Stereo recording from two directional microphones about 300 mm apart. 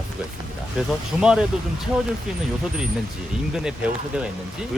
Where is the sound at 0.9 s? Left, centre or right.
Centre.